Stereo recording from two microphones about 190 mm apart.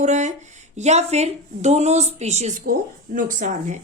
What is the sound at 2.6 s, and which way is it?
Speech, 45° right (ahead or behind).